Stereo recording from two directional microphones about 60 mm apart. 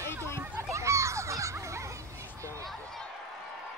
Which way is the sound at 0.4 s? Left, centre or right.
Right.